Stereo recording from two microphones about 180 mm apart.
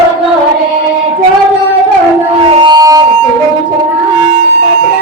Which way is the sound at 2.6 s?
25° right (ahead or behind).